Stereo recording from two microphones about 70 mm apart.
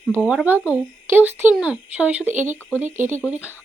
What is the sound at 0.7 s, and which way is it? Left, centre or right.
A child's voice, right.